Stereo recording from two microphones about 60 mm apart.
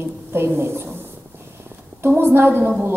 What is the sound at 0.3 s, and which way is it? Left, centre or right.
Speech, right.